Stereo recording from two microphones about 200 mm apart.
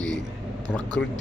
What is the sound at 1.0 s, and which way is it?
Speech, 5° left (ahead or behind).